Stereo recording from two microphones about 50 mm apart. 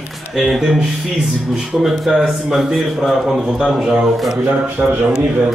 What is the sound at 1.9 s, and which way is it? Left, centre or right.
A man's voice, centre.